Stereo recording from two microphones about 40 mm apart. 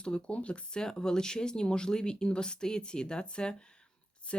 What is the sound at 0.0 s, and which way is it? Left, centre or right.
Speech, left.